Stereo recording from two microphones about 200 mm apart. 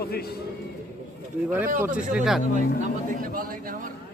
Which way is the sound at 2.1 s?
Centre (ahead or behind).